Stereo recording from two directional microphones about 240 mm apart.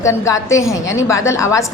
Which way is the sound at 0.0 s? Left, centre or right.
Centre.